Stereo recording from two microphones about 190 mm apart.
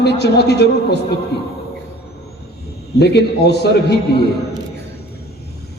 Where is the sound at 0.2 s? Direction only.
60° left (ahead or behind).